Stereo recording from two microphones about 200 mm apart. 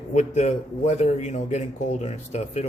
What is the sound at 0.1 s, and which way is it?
Speech, 35° left (ahead or behind).